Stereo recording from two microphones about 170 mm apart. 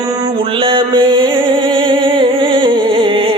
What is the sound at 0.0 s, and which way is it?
Music, 20° right (ahead or behind).